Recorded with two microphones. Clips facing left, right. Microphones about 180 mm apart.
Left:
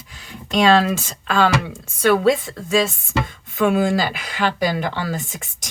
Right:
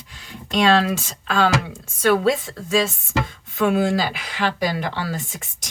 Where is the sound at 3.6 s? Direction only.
50° left (ahead or behind).